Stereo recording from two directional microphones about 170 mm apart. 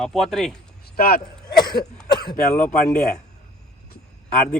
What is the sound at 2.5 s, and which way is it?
Speech, 5° left (ahead or behind).